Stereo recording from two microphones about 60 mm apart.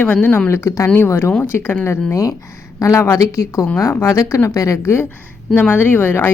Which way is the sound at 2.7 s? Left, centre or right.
Left.